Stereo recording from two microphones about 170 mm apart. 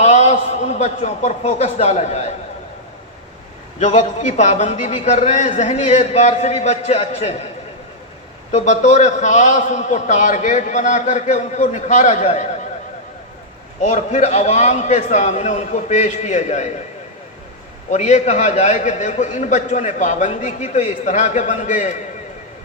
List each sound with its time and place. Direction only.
0.0 s a man's voice: 40° left (ahead or behind)
3.8 s a man's voice: 45° left (ahead or behind)
8.5 s a man's voice: 45° left (ahead or behind)
13.8 s a man's voice: 45° left (ahead or behind)
17.9 s a man's voice: 45° left (ahead or behind)